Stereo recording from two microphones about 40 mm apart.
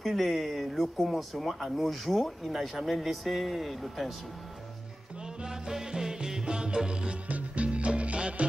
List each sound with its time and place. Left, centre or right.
0.0 s speech: centre
5.4 s music: centre
7.2 s music: right